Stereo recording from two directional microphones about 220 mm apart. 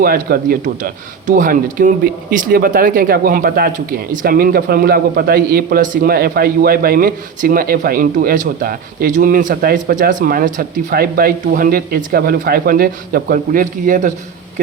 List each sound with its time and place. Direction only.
0.0 s speech: 40° right (ahead or behind)